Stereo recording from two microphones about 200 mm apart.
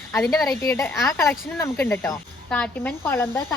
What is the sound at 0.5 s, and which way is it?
Speech, 15° left (ahead or behind).